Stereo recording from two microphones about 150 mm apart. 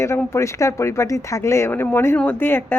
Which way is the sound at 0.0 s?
20° left (ahead or behind).